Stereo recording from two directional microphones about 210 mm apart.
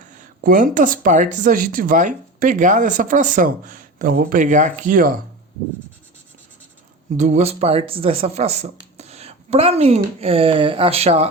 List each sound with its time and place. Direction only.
0.0 s a woman's voice: 35° right (ahead or behind)
7.2 s speech: 35° right (ahead or behind)